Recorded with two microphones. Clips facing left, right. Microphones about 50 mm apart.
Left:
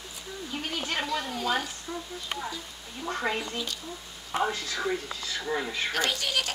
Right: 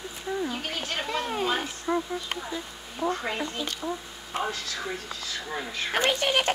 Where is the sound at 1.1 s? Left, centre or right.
Right.